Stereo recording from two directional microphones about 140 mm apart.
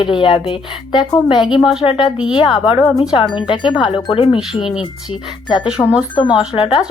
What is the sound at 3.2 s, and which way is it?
A woman's voice, 35° left (ahead or behind).